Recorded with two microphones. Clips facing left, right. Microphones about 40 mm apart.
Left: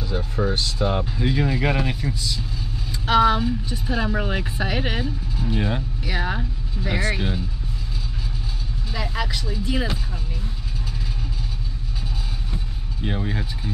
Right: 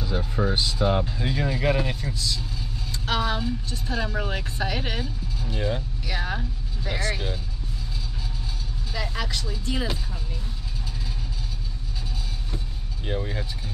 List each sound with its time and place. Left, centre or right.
0.0 s speech: centre
8.9 s speech: centre
13.0 s speech: centre